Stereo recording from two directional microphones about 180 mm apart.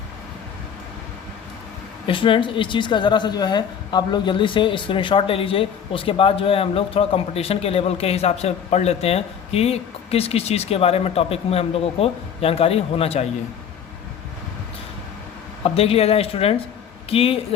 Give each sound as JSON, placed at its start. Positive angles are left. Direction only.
{"t": 2.0, "sound": "a woman's voice", "side_deg": 30}
{"t": 15.6, "sound": "a woman's voice", "side_deg": 30}